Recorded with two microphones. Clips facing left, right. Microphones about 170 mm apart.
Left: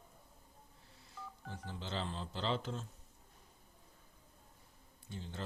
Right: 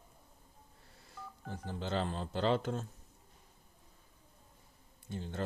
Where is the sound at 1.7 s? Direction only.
50° right (ahead or behind).